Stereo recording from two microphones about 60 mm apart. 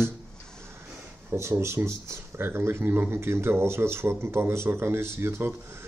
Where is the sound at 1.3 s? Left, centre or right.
Right.